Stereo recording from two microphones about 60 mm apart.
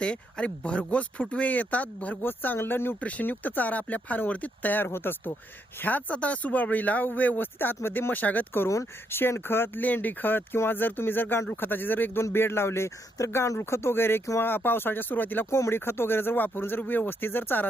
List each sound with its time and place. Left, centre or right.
0.0 s speech: centre; by 2.9 s left
3.0 s speech: left
5.8 s speech: left
9.0 s speech: left
9.8 s speech: left
13.2 s speech: left
13.6 s speech: left
15.4 s speech: left